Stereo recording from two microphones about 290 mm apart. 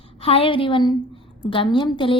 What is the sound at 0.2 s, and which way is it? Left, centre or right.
A woman's voice, centre.